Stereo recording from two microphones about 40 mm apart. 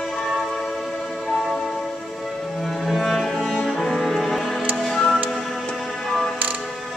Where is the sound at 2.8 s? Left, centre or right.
Centre.